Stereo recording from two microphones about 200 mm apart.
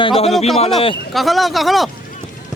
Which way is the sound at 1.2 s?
Centre (ahead or behind).